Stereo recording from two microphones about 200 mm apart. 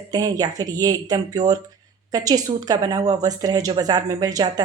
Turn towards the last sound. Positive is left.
turn(degrees=-20)  # may be behind; listen again after turning